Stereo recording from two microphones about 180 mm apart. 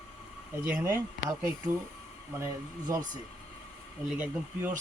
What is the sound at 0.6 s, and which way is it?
Speech, 10° right (ahead or behind).